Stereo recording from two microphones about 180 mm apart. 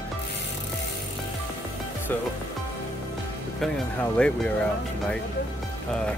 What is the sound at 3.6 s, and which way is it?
Speech, 5° left (ahead or behind).